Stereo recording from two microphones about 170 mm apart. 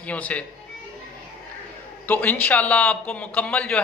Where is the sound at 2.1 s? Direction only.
10° left (ahead or behind).